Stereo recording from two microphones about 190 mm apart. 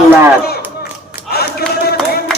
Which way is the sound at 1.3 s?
55° left (ahead or behind).